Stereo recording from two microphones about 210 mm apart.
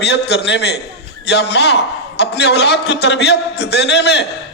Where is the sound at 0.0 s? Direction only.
50° left (ahead or behind).